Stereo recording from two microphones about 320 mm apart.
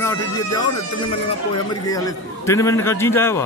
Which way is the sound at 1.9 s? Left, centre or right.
Centre.